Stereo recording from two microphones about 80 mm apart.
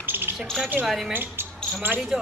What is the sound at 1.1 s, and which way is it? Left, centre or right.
Speech, right.